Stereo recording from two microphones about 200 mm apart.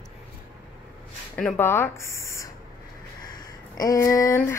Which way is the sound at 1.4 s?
5° left (ahead or behind).